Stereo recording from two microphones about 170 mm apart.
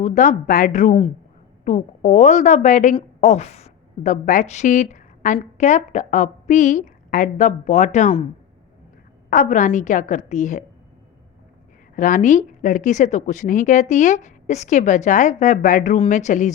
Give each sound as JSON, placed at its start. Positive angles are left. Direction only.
{"t": 0.0, "sound": "a woman's voice", "side_deg": 45}
{"t": 9.3, "sound": "a woman's voice", "side_deg": 45}
{"t": 11.9, "sound": "a woman's voice", "side_deg": 50}